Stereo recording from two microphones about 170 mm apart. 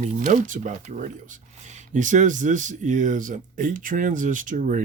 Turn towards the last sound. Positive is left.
turn(degrees=-50)  # may be behind; listen again after turning